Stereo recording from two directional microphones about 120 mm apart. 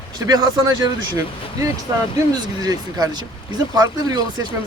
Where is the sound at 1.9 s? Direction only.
35° right (ahead or behind).